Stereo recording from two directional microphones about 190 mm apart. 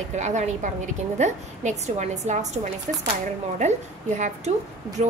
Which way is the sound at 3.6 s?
40° right (ahead or behind).